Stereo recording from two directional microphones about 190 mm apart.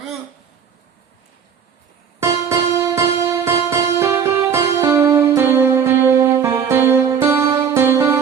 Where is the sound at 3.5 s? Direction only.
15° right (ahead or behind).